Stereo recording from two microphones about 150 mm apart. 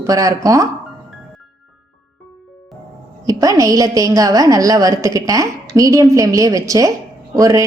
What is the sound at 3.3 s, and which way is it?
A woman's voice, 20° right (ahead or behind).